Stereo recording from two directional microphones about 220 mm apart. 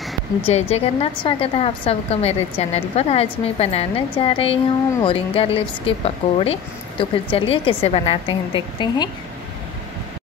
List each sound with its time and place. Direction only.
0.4 s a woman's voice: 30° left (ahead or behind)